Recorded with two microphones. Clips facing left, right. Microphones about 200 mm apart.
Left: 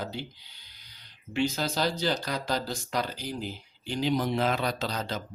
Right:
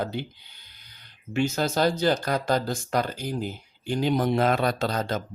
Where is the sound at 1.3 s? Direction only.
50° right (ahead or behind).